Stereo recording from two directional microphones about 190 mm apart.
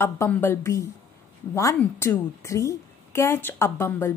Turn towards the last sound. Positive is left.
turn(degrees=10)  # may be behind; listen again after turning